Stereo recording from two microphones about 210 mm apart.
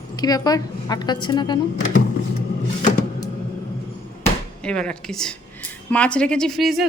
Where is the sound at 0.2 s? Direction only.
20° left (ahead or behind).